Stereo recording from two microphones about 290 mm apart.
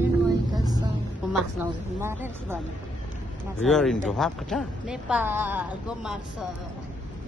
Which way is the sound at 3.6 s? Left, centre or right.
Centre.